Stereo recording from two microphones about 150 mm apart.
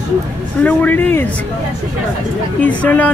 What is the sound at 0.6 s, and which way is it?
Speech, 10° left (ahead or behind).